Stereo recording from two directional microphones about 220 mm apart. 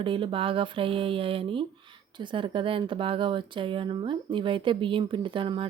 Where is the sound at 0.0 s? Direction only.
25° right (ahead or behind).